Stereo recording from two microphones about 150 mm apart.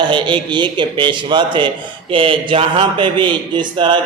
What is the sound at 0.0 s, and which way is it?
Speech, 30° right (ahead or behind).